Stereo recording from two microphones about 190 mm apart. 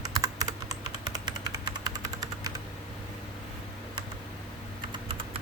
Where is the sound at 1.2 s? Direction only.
20° right (ahead or behind).